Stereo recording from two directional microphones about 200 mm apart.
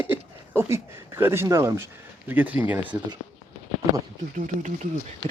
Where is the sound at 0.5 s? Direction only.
10° right (ahead or behind).